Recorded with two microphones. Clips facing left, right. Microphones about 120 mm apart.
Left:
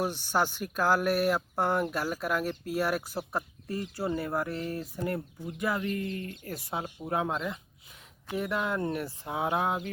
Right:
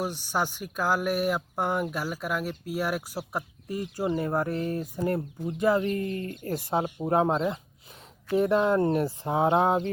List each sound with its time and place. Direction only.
0.0 s speech: 10° right (ahead or behind); by 9.9 s 30° right (ahead or behind)